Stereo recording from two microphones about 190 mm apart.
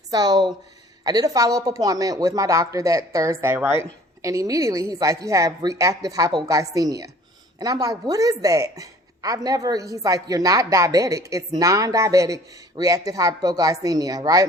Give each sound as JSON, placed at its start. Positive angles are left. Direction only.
{"t": 0.1, "sound": "a woman's voice", "side_deg": -20}